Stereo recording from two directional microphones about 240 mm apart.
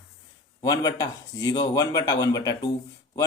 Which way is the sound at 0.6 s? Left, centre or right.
Centre.